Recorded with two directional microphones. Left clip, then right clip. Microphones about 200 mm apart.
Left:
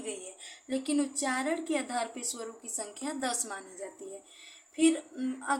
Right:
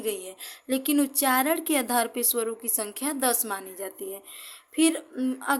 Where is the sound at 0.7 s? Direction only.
50° right (ahead or behind).